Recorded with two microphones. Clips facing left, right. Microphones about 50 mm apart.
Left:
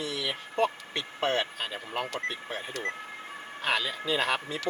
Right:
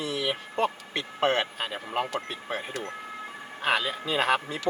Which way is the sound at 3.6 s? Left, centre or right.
Right.